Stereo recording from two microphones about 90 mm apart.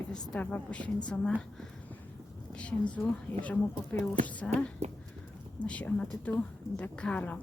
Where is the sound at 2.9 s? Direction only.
20° left (ahead or behind).